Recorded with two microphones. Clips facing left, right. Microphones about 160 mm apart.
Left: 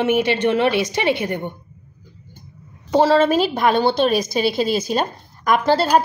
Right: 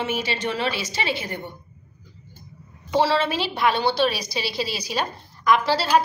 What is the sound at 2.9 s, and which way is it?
A woman's voice, 45° left (ahead or behind).